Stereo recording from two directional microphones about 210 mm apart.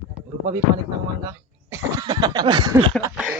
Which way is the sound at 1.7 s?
15° right (ahead or behind).